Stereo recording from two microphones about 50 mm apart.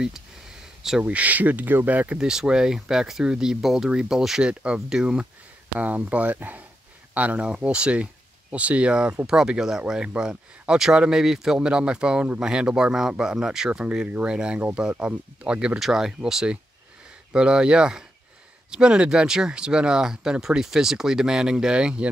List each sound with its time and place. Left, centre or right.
1.0 s speech: right
2.1 s speech: centre
4.4 s speech: centre
5.8 s speech: right
15.8 s speech: centre